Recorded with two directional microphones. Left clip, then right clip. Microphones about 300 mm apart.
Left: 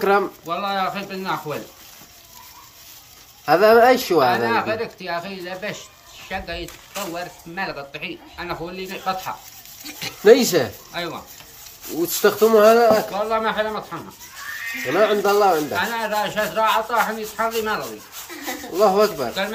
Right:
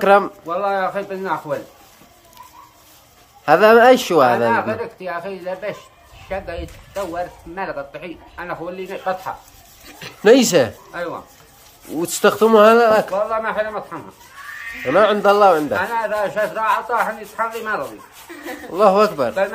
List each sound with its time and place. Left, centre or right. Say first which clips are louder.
0.0 s speech: right 5 dB; right
3.4 s speech: right 3 dB; right
9.8 s speech: left 4 dB; centre
10.2 s speech: right 2 dB; right
10.9 s speech: right 1 dB; centre
12.2 s speech: right 3 dB; right
14.9 s speech: right 4 dB; right
15.8 s speech: right 2 dB; centre
18.8 s speech: right 3 dB; right